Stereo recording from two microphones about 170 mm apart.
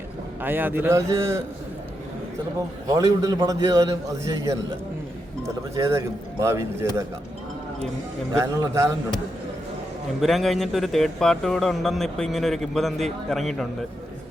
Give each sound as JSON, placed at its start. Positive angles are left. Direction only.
{"t": 0.4, "sound": "a man's voice", "side_deg": -10}
{"t": 2.9, "sound": "a man's voice", "side_deg": -20}
{"t": 5.7, "sound": "a man's voice", "side_deg": -15}
{"t": 8.3, "sound": "a man's voice", "side_deg": -20}
{"t": 10.2, "sound": "speech", "side_deg": 0}